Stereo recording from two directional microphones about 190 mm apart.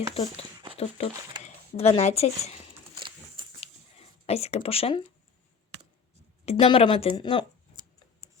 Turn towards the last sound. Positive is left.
turn(degrees=25)  # may be behind; listen again after turning